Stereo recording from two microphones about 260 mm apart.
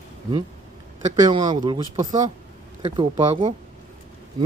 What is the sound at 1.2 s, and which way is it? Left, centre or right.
A man's voice, right.